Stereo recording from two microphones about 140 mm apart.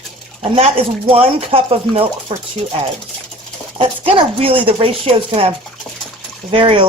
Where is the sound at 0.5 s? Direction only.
45° right (ahead or behind).